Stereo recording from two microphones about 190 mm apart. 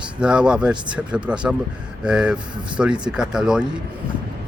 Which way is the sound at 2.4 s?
25° right (ahead or behind).